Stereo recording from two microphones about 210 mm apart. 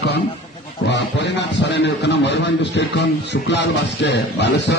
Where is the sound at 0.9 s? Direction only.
55° left (ahead or behind).